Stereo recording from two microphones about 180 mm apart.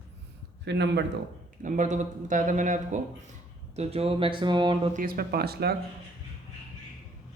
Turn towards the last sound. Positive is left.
turn(degrees=-60)  # may be behind; listen again after turning